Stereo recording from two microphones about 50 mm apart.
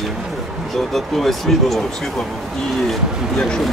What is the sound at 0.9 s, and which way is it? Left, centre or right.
Speech, centre.